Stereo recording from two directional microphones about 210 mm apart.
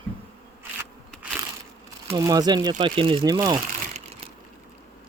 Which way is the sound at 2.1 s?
15° right (ahead or behind).